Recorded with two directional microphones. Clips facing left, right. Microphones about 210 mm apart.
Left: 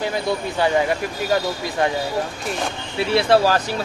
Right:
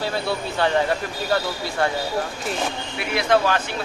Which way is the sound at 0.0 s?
15° left (ahead or behind).